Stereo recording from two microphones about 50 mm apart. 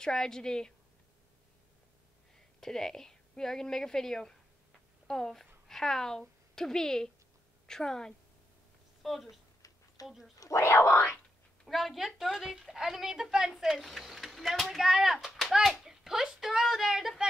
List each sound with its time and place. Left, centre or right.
0.0 s speech: centre
2.6 s a woman's voice: centre
9.0 s a woman's voice: centre
10.5 s speech: left
11.6 s a woman's voice: centre
14.8 s speech: centre
15.5 s a sound: centre